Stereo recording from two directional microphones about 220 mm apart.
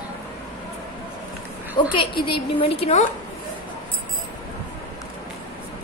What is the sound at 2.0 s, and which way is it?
A woman's voice, 25° left (ahead or behind).